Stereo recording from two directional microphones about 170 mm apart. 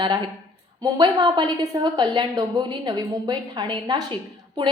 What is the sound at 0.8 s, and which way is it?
A woman's voice, 25° right (ahead or behind).